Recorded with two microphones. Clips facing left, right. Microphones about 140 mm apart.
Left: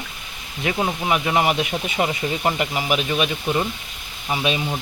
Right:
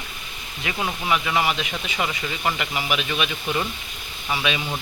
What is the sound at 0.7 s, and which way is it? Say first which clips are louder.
Speech: left 3 dB; 25° left (ahead or behind).